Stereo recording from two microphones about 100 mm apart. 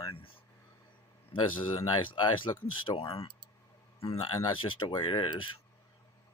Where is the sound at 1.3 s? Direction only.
55° left (ahead or behind).